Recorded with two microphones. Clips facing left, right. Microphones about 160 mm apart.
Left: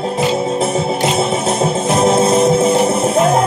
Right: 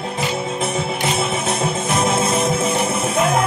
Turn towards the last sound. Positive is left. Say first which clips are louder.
# left 5 dB
turn(degrees=35)  # may be behind; listen again after turning